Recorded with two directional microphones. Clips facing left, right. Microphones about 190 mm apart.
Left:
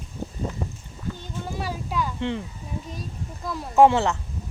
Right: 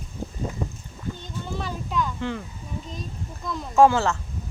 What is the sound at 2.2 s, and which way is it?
Speech, 25° left (ahead or behind).